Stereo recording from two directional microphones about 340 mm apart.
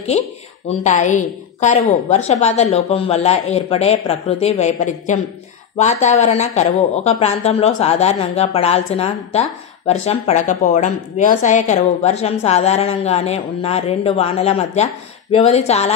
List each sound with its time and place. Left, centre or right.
0.2 s a woman's voice: centre